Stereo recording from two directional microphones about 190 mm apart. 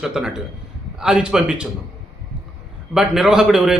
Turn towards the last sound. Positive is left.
turn(degrees=-5)  # may be behind; listen again after turning